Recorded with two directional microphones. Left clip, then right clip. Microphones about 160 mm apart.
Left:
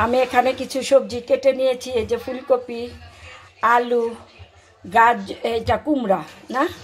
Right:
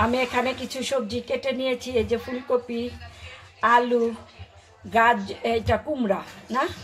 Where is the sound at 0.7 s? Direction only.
55° left (ahead or behind).